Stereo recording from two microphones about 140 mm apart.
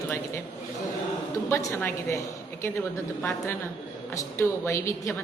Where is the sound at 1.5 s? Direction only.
20° left (ahead or behind).